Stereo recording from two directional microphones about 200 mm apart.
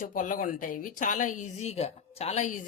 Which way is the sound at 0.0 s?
40° left (ahead or behind).